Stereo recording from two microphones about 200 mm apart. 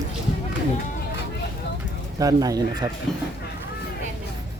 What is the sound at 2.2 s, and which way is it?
Speech, 20° right (ahead or behind).